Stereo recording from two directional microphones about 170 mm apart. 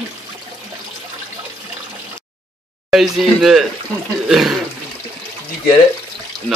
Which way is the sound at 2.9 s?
Centre (ahead or behind).